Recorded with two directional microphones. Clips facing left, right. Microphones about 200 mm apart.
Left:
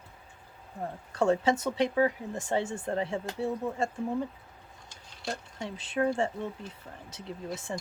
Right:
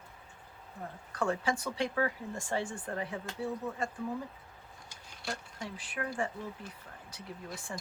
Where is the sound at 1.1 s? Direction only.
25° left (ahead or behind).